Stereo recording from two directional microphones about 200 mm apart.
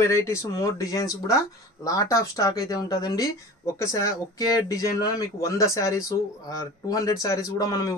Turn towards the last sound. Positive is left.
turn(degrees=15)  # may be behind; listen again after turning